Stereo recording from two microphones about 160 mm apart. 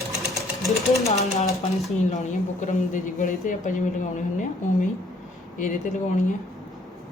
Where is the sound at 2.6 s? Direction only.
55° left (ahead or behind).